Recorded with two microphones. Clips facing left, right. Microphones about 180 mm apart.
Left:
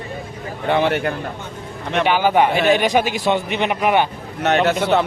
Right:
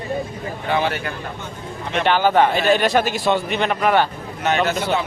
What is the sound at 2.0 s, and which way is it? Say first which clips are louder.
A man's voice: even; 10° left (ahead or behind).